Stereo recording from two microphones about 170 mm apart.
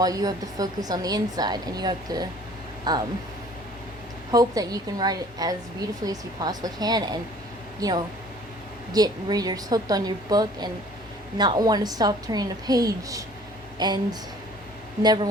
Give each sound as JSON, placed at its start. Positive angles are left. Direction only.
{"t": 0.0, "sound": "a woman's voice", "side_deg": -20}
{"t": 4.3, "sound": "a woman's voice", "side_deg": -20}